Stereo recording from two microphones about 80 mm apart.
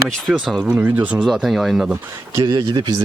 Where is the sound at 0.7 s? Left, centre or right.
Right.